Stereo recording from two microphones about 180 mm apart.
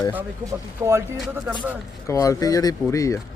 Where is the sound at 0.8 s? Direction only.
15° right (ahead or behind).